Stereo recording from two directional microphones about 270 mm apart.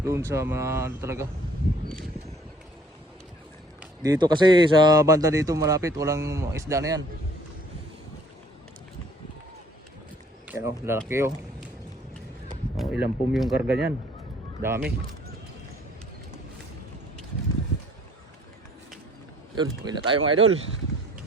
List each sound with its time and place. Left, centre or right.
0.0 s speech: centre
4.0 s speech: centre
10.5 s speech: centre
12.7 s speech: centre
19.5 s speech: centre
20.1 s speech: right